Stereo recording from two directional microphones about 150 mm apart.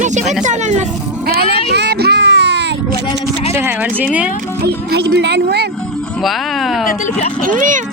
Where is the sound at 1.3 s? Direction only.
90° right.